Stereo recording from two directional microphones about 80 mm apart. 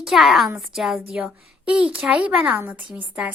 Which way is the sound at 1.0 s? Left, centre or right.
Centre.